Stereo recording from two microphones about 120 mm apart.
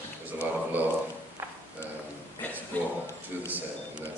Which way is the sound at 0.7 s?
15° right (ahead or behind).